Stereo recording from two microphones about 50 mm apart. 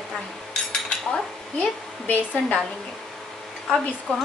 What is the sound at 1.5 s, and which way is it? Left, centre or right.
A woman's voice, left.